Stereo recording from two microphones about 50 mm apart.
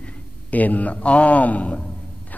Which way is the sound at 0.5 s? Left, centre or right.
Left.